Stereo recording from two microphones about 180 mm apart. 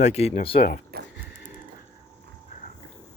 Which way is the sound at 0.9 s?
60° right (ahead or behind).